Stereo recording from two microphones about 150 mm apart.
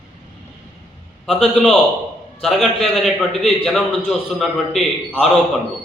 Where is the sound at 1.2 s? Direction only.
Centre (ahead or behind).